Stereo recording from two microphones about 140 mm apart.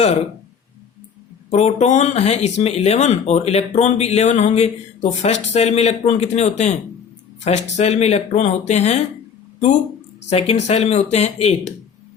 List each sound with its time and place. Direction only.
1.5 s speech: 50° left (ahead or behind)
10.2 s speech: 50° left (ahead or behind)